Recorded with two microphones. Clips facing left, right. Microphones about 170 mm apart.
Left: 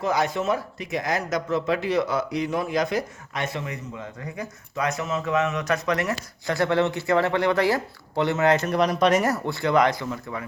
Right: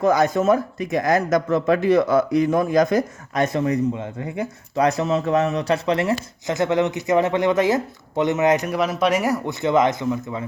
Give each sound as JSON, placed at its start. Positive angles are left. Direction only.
{"t": 0.0, "sound": "speech", "side_deg": -45}